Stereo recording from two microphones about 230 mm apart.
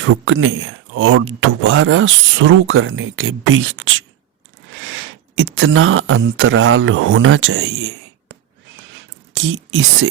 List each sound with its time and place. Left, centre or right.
0.0 s speech: right